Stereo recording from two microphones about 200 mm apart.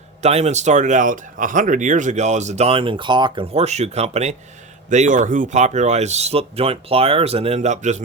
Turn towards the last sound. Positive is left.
turn(degrees=-35)  # may be behind; listen again after turning